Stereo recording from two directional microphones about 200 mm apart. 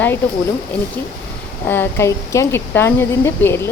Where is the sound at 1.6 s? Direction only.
10° left (ahead or behind).